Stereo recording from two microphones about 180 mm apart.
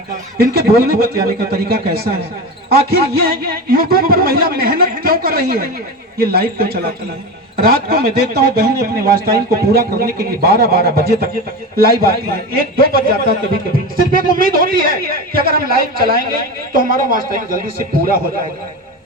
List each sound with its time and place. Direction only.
0.3 s a man's voice: 60° right (ahead or behind)